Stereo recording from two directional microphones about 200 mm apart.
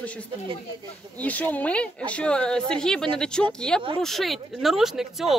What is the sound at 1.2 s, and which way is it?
Speech, 5° left (ahead or behind).